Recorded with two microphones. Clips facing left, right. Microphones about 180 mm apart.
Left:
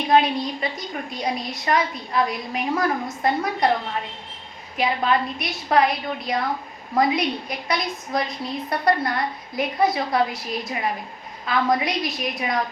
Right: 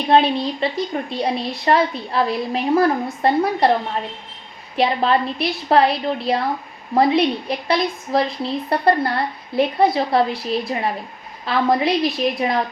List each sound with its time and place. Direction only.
0.1 s a woman's voice: 30° right (ahead or behind)
4.8 s a woman's voice: 30° right (ahead or behind)